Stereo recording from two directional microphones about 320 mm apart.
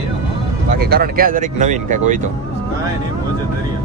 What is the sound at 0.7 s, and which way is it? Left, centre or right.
Speech, right.